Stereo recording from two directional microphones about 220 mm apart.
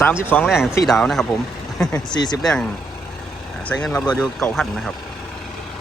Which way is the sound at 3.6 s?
5° left (ahead or behind).